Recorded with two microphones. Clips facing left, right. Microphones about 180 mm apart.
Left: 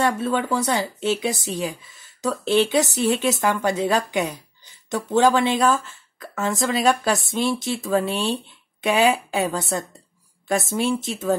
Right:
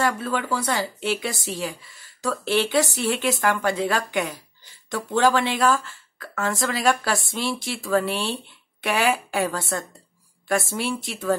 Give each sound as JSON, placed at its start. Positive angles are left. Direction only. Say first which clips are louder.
{"t": 0.0, "sound": "speech", "louder": "left 3 dB", "side_deg": 25}